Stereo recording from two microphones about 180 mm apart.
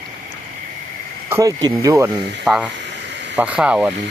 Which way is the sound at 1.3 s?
20° right (ahead or behind).